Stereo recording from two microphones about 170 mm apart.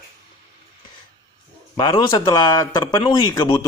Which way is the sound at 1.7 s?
25° left (ahead or behind).